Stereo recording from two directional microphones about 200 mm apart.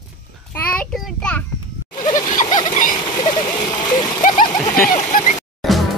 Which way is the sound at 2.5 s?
20° left (ahead or behind).